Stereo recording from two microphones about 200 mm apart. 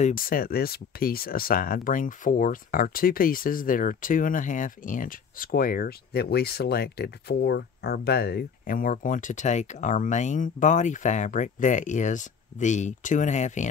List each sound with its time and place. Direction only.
0.0 s speech: 45° left (ahead or behind)